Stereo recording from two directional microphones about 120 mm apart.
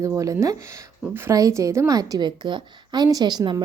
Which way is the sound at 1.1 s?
25° right (ahead or behind).